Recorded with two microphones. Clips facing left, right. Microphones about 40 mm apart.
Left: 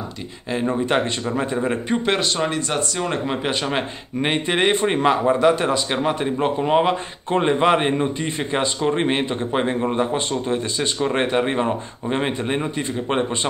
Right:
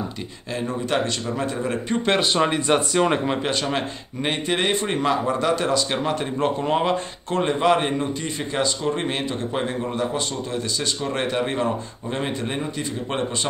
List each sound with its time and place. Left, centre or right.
0.5 s a man's voice: left
2.3 s speech: centre
3.4 s a man's voice: centre